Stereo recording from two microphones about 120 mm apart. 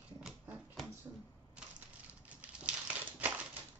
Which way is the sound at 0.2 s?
5° right (ahead or behind).